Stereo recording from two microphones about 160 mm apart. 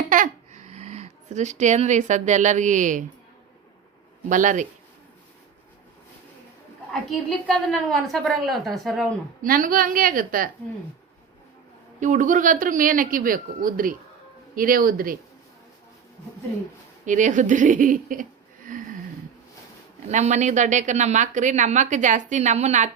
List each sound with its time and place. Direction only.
0.1 s speech: 50° right (ahead or behind)
4.3 s speech: 55° right (ahead or behind)
7.1 s a woman's voice: centre (ahead or behind)
9.4 s a woman's voice: 60° right (ahead or behind)
11.9 s a woman's voice: 55° right (ahead or behind)
17.1 s speech: 50° right (ahead or behind)
20.1 s speech: 45° right (ahead or behind)